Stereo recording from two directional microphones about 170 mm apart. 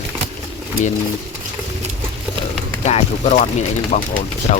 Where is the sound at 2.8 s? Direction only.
40° left (ahead or behind).